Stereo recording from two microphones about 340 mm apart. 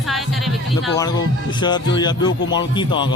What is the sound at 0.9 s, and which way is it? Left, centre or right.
Speech, centre.